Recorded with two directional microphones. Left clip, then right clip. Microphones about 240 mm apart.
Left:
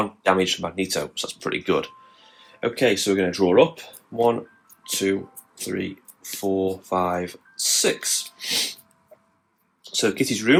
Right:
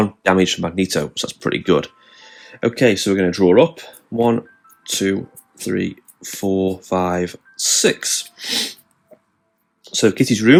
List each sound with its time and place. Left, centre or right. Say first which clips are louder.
0.0 s speech: right 4 dB; right
9.9 s speech: right 6 dB; right